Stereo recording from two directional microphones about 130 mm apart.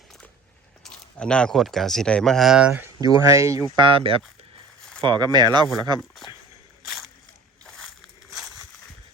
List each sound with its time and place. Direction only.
0.8 s biting: 5° left (ahead or behind)
1.2 s speech: 5° left (ahead or behind)
3.0 s speech: 25° right (ahead or behind)
3.8 s speech: 40° right (ahead or behind)
6.8 s slosh: centre (ahead or behind)
7.6 s a sound: 5° left (ahead or behind)